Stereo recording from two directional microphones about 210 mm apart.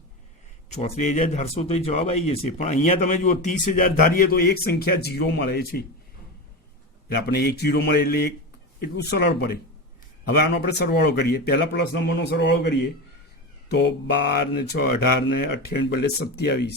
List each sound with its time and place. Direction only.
0.7 s speech: 35° left (ahead or behind); by 5.8 s 50° left (ahead or behind)
7.3 s speech: 50° left (ahead or behind)